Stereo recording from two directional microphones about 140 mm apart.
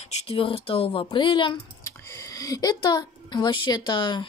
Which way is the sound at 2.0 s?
20° left (ahead or behind).